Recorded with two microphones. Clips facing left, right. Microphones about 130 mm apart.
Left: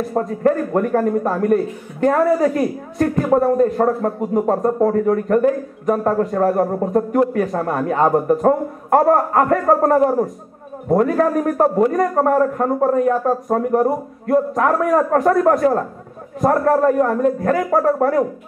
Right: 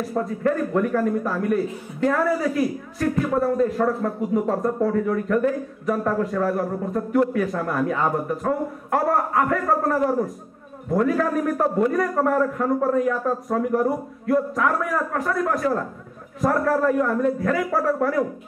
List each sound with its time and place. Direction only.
0.1 s a man's voice: 40° left (ahead or behind)
13.6 s a man's voice: 45° left (ahead or behind)